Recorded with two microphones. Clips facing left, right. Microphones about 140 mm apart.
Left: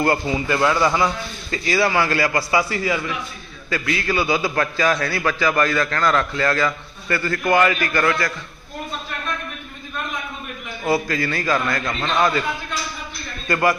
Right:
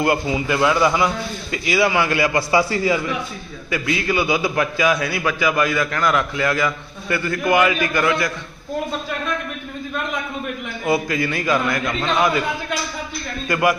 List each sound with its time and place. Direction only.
0.0 s a man's voice: 15° right (ahead or behind)
10.8 s a man's voice: 15° right (ahead or behind)
13.5 s a man's voice: 15° right (ahead or behind)